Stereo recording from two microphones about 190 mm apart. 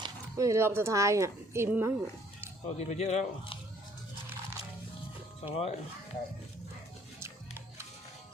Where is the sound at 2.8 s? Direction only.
35° left (ahead or behind).